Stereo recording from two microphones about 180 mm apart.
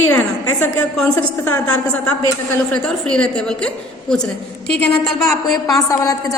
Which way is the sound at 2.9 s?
5° left (ahead or behind).